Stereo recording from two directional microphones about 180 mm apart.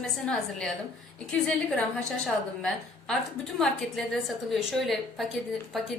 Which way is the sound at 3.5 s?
Centre (ahead or behind).